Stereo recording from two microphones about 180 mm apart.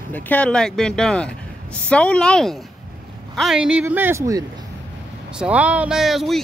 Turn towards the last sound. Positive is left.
turn(degrees=0)  # may be behind; listen again after turning